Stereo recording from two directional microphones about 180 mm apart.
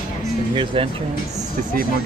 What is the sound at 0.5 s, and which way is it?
Speech, 30° right (ahead or behind).